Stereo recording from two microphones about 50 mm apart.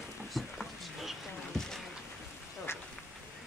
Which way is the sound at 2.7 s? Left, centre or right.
Left.